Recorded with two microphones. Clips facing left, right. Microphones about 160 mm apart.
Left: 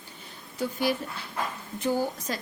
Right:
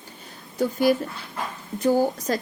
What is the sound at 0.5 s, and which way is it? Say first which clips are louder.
Speech: right 7 dB; 45° right (ahead or behind).